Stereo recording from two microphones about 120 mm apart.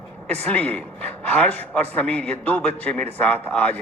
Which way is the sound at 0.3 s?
10° left (ahead or behind).